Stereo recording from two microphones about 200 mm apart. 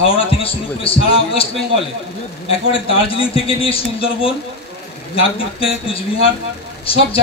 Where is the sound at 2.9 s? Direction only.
30° left (ahead or behind).